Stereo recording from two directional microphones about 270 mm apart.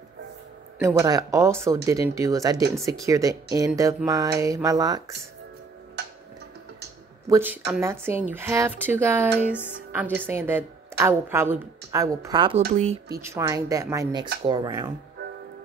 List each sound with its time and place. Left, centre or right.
0.7 s a woman's voice: centre
7.2 s a woman's voice: centre; by 13.0 s right
13.1 s a woman's voice: centre